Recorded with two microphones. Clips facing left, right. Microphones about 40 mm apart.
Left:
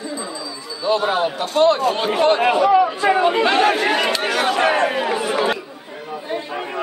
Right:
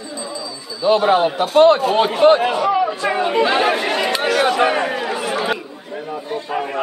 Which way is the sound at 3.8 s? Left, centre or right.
Centre.